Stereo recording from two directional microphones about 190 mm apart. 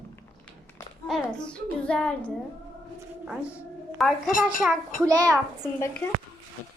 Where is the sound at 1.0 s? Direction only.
Centre (ahead or behind).